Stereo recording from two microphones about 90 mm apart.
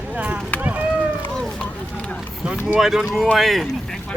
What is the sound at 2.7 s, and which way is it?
Speech, 5° right (ahead or behind).